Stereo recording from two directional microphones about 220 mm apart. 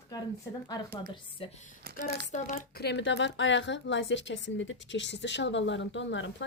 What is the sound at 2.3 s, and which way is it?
A woman's voice, 35° left (ahead or behind).